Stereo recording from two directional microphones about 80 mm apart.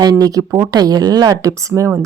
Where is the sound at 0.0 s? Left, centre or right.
Right.